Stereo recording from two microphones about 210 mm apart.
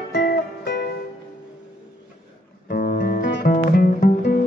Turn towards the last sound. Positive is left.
turn(degrees=40)  # may be behind; listen again after turning